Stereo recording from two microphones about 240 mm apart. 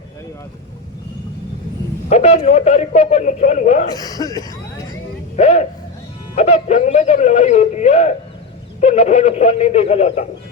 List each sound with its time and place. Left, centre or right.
2.0 s a man's voice: left
3.9 s speech: centre
5.4 s a man's voice: left